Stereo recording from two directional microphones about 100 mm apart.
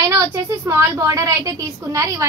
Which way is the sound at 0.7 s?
30° right (ahead or behind).